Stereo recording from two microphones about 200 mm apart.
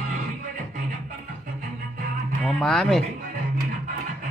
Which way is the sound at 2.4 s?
Centre (ahead or behind).